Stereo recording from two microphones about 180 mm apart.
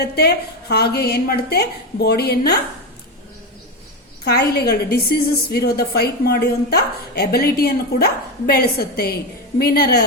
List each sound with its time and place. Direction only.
0.2 s a woman's voice: 60° left (ahead or behind)
4.3 s a woman's voice: 60° left (ahead or behind)